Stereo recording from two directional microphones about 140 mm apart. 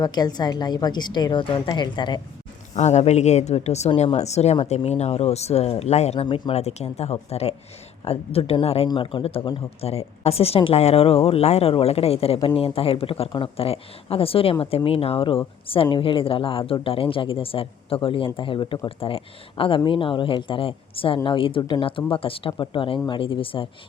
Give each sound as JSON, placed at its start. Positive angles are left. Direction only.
{"t": 0.0, "sound": "speech", "side_deg": 30}
{"t": 2.7, "sound": "a woman's voice", "side_deg": 55}
{"t": 4.5, "sound": "a woman's voice", "side_deg": 40}
{"t": 6.2, "sound": "a woman's voice", "side_deg": 40}